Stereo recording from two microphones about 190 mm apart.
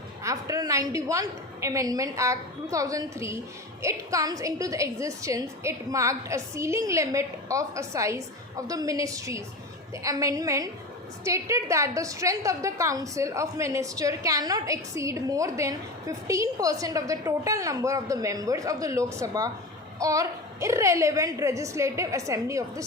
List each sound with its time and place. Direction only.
0.2 s a woman's voice: 15° right (ahead or behind)